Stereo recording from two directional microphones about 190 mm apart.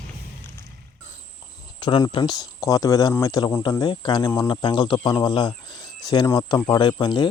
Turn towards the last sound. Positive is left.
turn(degrees=25)  # may be behind; listen again after turning